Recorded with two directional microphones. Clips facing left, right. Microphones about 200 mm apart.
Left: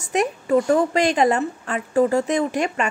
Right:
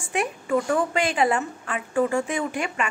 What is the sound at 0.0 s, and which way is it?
A woman's voice, 40° left (ahead or behind).